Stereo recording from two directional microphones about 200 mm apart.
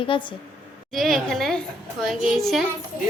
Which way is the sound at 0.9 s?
Centre (ahead or behind).